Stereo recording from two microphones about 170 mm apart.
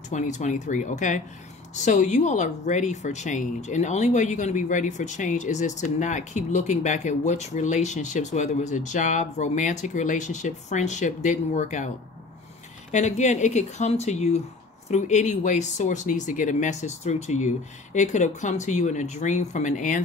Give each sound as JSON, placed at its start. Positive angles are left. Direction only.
{"t": 0.1, "sound": "speech", "side_deg": 45}
{"t": 12.9, "sound": "speech", "side_deg": 45}